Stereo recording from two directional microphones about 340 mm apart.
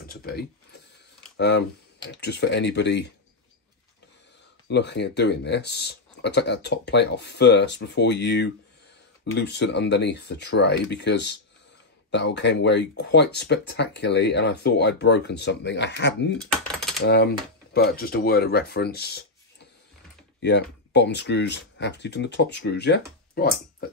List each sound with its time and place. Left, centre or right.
0.0 s a sound: left
1.3 s speech: left
4.6 s speech: left